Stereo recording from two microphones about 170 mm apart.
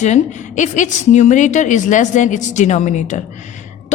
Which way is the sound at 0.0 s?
45° left (ahead or behind).